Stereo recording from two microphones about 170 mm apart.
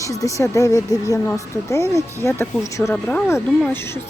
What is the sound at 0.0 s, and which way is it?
Speech, 20° left (ahead or behind).